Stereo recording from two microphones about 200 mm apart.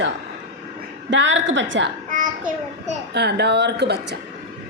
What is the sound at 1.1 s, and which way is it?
Speech, 65° right (ahead or behind).